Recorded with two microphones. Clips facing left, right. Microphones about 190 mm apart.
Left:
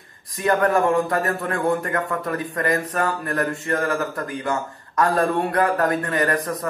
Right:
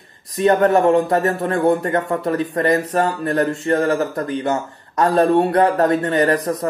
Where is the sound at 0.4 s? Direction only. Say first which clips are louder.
Right 5 dB; 25° right (ahead or behind).